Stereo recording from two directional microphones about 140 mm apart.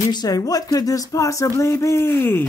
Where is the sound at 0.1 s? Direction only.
25° left (ahead or behind).